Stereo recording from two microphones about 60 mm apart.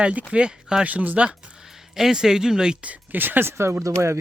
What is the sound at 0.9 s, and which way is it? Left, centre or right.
Speech, right.